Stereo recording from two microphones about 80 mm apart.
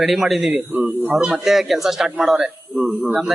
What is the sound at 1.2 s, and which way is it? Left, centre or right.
Speech, centre.